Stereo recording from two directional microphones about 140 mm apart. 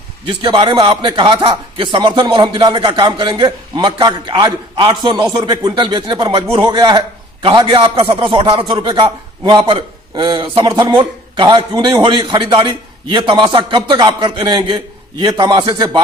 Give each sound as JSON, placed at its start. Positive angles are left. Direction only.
{"t": 0.3, "sound": "speech", "side_deg": -35}